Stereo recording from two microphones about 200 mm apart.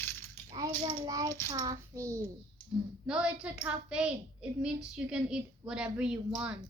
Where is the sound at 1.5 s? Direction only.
20° right (ahead or behind).